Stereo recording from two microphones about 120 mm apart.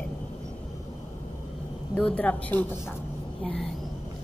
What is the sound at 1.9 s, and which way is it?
Speech, 10° left (ahead or behind).